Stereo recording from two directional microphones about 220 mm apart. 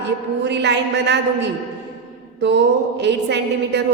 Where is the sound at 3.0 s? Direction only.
50° right (ahead or behind).